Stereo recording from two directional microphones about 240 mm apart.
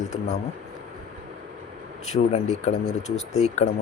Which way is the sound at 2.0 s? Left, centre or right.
Left.